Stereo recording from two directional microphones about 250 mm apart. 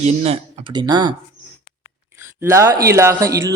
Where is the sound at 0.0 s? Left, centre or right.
Right.